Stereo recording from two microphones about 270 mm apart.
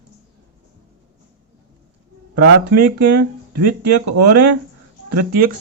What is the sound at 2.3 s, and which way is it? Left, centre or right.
Speech, right.